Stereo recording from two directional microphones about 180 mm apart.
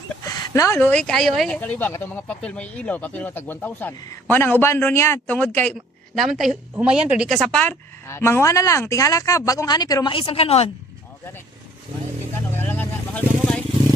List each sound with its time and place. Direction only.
0.3 s a sound: 20° left (ahead or behind)
0.8 s a woman's voice: 5° left (ahead or behind); by 10.7 s 35° left (ahead or behind)
12.5 s vehicle: 10° left (ahead or behind)